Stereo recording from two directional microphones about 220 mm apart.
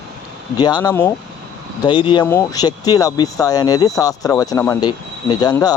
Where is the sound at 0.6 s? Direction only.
20° left (ahead or behind).